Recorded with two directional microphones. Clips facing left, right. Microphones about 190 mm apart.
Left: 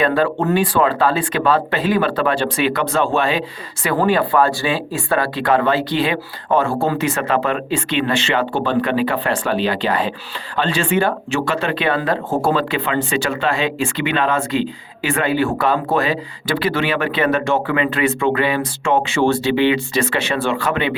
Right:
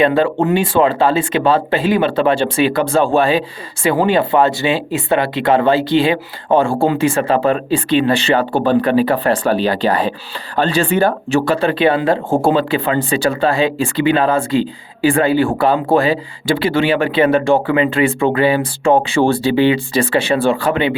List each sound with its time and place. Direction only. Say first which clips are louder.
0.0 s speech: right 3 dB; 25° right (ahead or behind)